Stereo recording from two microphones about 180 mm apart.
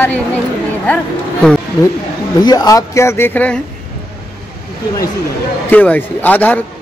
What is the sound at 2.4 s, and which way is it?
Speech, 25° left (ahead or behind).